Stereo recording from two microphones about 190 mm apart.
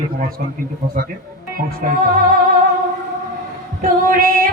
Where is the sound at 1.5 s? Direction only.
45° right (ahead or behind).